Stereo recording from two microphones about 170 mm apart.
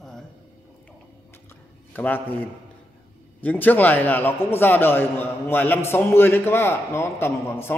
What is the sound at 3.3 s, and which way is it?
A man's voice, 10° left (ahead or behind).